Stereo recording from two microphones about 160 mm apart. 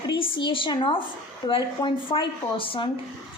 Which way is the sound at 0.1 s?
30° left (ahead or behind).